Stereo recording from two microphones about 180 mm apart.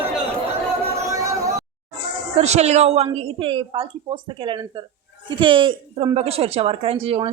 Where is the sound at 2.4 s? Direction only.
35° right (ahead or behind).